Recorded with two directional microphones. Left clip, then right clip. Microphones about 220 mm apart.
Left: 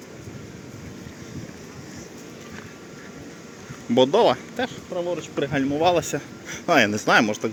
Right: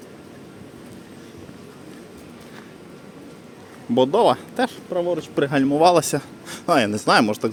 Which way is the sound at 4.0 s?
15° right (ahead or behind).